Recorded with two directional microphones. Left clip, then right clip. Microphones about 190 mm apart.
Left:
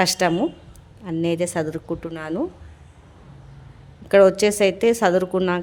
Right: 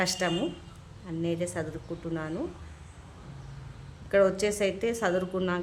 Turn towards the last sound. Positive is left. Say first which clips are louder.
# left 9 dB
turn(degrees=40)  # may be behind; listen again after turning